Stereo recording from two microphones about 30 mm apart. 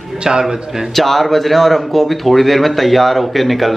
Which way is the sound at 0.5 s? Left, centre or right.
Centre.